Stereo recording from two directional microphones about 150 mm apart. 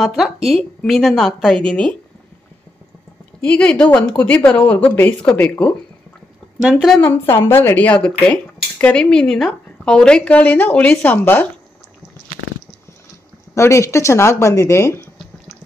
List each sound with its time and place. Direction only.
0.0 s a woman's voice: centre (ahead or behind)
3.3 s speech: 5° left (ahead or behind)
6.6 s a woman's voice: centre (ahead or behind)
7.0 s speech: 15° left (ahead or behind)
13.6 s speech: 20° left (ahead or behind)